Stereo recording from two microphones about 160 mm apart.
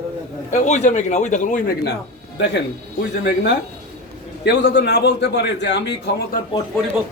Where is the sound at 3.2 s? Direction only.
90° left.